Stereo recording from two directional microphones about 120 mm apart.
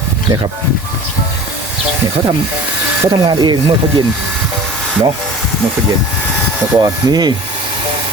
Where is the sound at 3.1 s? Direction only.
35° right (ahead or behind).